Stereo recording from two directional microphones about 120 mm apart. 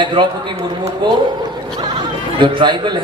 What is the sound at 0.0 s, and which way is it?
Speech, 40° right (ahead or behind).